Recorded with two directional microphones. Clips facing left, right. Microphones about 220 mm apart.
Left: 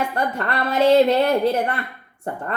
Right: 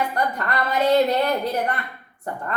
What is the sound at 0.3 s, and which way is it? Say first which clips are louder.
A woman's voice: left 3 dB; 30° left (ahead or behind).